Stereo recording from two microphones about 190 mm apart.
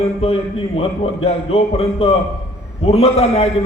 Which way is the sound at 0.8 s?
30° left (ahead or behind).